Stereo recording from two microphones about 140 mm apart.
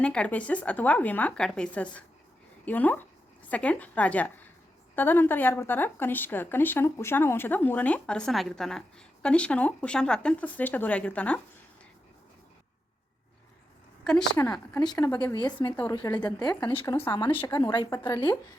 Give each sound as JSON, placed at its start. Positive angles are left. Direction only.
{"t": 0.0, "sound": "speech", "side_deg": 10}
{"t": 14.0, "sound": "a woman's voice", "side_deg": 5}
{"t": 14.8, "sound": "a woman's voice", "side_deg": 25}
{"t": 15.2, "sound": "a woman's voice", "side_deg": 30}